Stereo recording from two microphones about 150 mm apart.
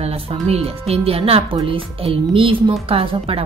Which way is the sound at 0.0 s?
40° right (ahead or behind).